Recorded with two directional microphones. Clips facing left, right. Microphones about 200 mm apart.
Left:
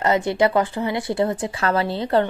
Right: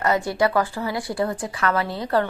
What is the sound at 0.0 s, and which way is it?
Speech, 20° left (ahead or behind).